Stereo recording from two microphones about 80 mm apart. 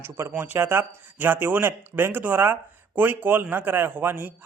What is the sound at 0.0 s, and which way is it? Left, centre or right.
Speech, right.